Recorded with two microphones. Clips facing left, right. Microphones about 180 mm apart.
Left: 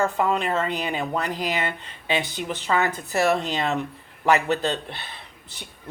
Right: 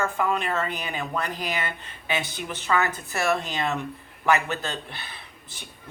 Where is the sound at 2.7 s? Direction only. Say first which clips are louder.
Left 1 dB; 20° left (ahead or behind).